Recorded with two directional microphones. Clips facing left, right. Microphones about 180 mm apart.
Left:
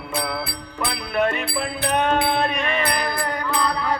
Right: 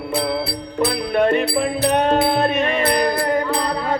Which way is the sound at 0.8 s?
35° right (ahead or behind).